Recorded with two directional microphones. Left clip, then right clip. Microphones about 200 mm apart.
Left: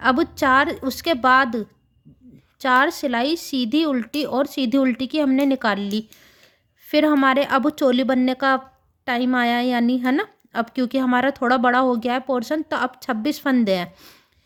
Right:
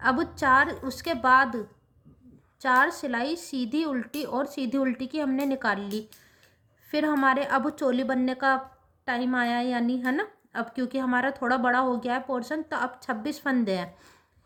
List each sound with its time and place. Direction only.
0.0 s a woman's voice: 40° left (ahead or behind)